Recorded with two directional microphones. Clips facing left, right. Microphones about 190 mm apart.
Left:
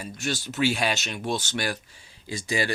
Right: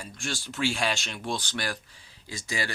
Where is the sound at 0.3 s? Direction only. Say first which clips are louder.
Left 4 dB; 20° left (ahead or behind).